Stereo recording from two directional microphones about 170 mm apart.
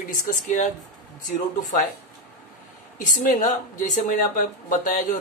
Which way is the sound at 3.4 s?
50° left (ahead or behind).